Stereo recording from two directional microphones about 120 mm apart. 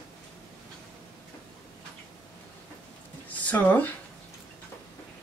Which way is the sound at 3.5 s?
15° left (ahead or behind).